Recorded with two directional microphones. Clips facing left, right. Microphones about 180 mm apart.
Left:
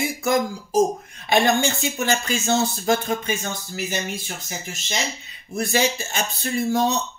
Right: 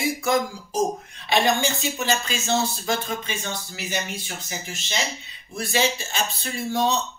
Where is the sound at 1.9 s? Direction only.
50° left (ahead or behind).